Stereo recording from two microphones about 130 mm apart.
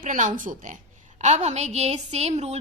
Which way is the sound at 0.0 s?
85° right.